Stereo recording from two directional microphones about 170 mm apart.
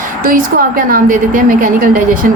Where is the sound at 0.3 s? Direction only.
55° right (ahead or behind).